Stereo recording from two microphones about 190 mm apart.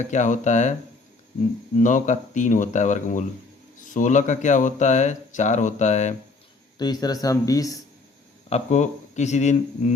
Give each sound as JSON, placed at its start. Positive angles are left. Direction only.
{"t": 0.0, "sound": "speech", "side_deg": 40}
{"t": 1.7, "sound": "speech", "side_deg": 40}
{"t": 6.7, "sound": "speech", "side_deg": 20}
{"t": 8.4, "sound": "speech", "side_deg": 35}